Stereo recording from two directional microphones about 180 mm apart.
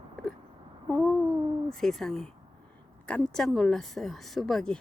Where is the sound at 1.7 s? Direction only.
Centre (ahead or behind).